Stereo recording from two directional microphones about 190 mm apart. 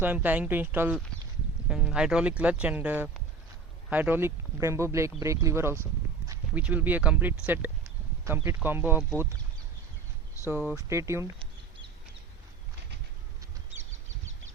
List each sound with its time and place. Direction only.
0.0 s speech: 10° right (ahead or behind)
10.5 s speech: 10° right (ahead or behind)